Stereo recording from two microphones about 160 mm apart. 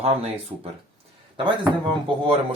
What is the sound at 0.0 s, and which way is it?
Speech, 40° right (ahead or behind).